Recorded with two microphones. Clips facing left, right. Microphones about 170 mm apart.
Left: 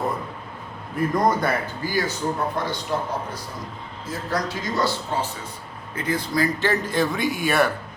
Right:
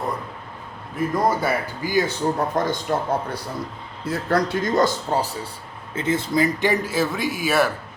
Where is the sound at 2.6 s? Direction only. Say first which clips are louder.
Right 5 dB; 45° right (ahead or behind).